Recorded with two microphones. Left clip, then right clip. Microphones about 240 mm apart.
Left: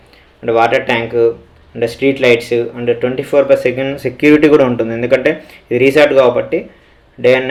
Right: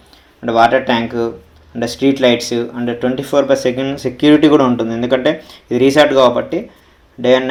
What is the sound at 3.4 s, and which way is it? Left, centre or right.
Speech, centre.